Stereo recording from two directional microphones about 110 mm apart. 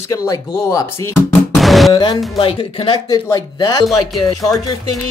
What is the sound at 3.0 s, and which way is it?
Speech, 35° left (ahead or behind).